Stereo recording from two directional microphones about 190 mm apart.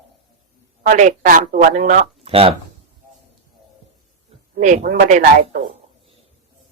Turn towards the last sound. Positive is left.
turn(degrees=-45)  # may be behind; listen again after turning